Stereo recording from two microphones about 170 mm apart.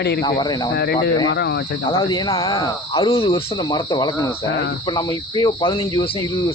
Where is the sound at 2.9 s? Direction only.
35° left (ahead or behind).